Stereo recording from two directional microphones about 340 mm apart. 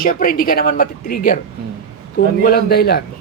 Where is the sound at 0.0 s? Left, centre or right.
Left.